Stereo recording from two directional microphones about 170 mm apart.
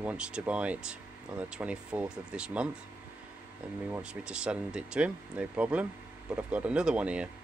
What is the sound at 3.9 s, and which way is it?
Speech, 5° right (ahead or behind).